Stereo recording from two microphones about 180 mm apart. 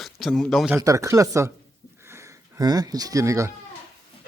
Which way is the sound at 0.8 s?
15° right (ahead or behind).